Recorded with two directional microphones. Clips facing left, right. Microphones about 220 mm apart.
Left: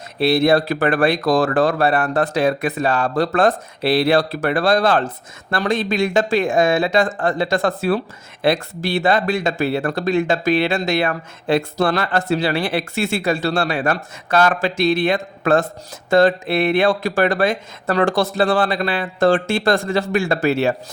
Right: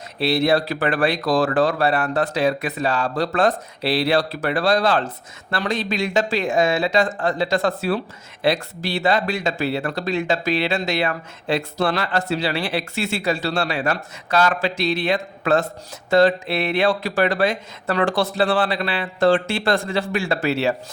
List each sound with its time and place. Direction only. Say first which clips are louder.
0.2 s speech: left 4 dB; 50° left (ahead or behind)